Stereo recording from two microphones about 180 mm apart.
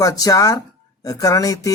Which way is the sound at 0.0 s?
20° left (ahead or behind).